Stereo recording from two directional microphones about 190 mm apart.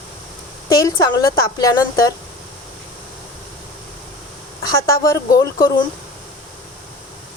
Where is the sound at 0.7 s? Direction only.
20° left (ahead or behind).